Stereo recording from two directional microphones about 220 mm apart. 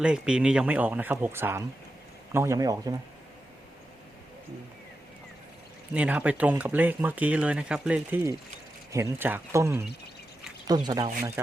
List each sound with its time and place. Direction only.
0.0 s speech: 5° right (ahead or behind)
5.9 s speech: 5° right (ahead or behind)
11.0 s speech: 35° right (ahead or behind)